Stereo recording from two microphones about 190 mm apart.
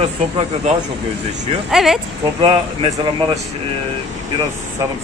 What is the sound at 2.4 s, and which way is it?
Speech, 30° right (ahead or behind).